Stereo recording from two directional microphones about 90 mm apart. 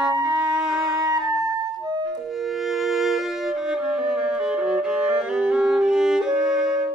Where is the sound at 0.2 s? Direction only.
10° right (ahead or behind).